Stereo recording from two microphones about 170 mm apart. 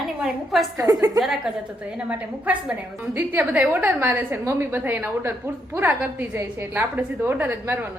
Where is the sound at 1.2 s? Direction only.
Centre (ahead or behind).